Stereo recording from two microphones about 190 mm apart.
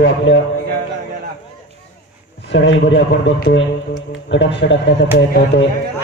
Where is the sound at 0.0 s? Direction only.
75° left (ahead or behind).